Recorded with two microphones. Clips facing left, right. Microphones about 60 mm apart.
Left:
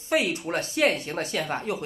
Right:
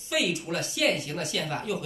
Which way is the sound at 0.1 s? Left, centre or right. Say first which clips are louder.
Left 3 dB; left.